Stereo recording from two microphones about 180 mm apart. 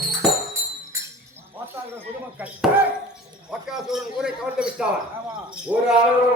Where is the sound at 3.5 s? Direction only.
5° right (ahead or behind).